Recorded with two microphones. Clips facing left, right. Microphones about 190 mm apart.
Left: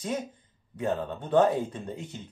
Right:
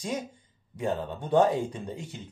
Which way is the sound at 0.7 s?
10° right (ahead or behind).